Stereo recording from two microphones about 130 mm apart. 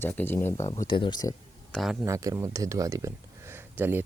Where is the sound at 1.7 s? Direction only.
Centre (ahead or behind).